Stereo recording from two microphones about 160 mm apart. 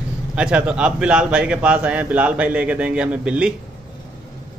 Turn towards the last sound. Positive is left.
turn(degrees=-5)  # may be behind; listen again after turning